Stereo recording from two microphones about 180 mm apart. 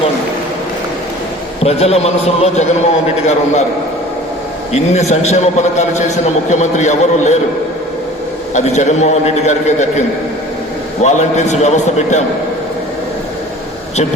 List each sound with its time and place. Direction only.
1.6 s a man's voice: 35° left (ahead or behind)
4.7 s a man's voice: 40° left (ahead or behind)
8.5 s a man's voice: 40° left (ahead or behind)
11.0 s a man's voice: 40° left (ahead or behind)